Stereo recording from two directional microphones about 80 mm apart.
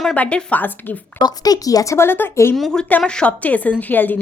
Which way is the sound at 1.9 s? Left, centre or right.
Left.